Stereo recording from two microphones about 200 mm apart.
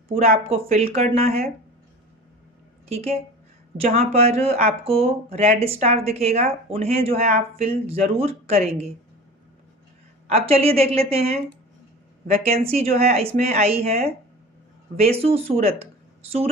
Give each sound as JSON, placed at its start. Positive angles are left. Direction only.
{"t": 0.2, "sound": "speech", "side_deg": -30}
{"t": 2.9, "sound": "a woman's voice", "side_deg": -30}
{"t": 10.2, "sound": "a woman's voice", "side_deg": -30}
{"t": 12.6, "sound": "a woman's voice", "side_deg": -30}
{"t": 15.6, "sound": "a sound", "side_deg": -30}